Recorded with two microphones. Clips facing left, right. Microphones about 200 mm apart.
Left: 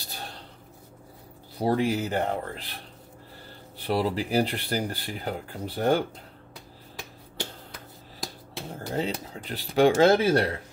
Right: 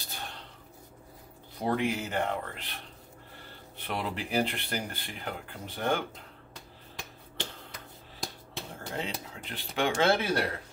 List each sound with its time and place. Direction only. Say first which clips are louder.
0.0 s a sound: left 2 dB; 35° left (ahead or behind)
1.6 s speech: left 5 dB; 35° left (ahead or behind)
7.0 s finger snapping: left 3 dB; 5° left (ahead or behind)
8.9 s speech: left 7 dB; 35° left (ahead or behind)